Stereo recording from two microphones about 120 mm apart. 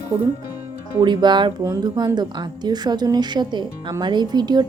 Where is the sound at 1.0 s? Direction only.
40° right (ahead or behind).